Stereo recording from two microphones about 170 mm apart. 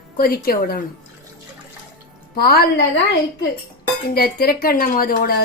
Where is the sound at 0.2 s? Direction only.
60° left (ahead or behind).